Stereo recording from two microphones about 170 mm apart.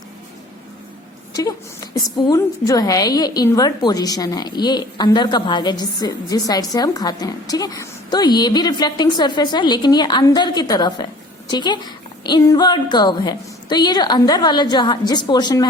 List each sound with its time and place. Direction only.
1.3 s a woman's voice: 20° left (ahead or behind)